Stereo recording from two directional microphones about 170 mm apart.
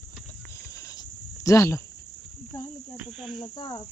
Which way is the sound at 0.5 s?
20° left (ahead or behind).